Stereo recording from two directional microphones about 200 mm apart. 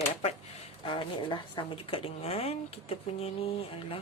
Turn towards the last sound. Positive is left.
turn(degrees=25)  # may be behind; listen again after turning